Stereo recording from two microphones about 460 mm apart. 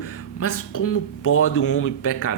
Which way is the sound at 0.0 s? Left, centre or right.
Left.